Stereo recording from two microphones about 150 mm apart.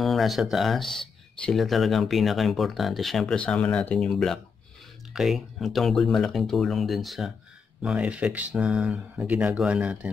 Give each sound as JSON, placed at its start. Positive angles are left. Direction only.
{"t": 0.0, "sound": "speech", "side_deg": 0}